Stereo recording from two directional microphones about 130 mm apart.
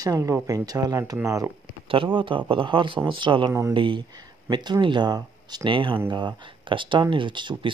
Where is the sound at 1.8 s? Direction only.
40° right (ahead or behind).